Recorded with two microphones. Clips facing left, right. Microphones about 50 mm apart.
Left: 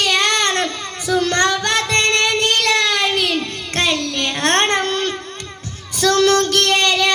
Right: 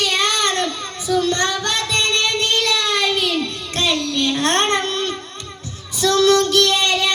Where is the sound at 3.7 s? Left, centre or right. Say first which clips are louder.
Left 1 dB; left.